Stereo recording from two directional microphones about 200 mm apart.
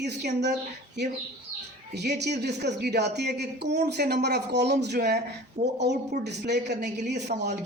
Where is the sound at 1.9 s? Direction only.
55° right (ahead or behind).